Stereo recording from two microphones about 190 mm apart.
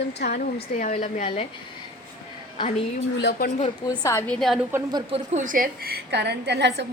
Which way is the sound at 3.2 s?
55° left (ahead or behind).